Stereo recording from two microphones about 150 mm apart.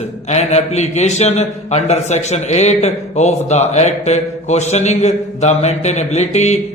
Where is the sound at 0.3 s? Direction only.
45° left (ahead or behind).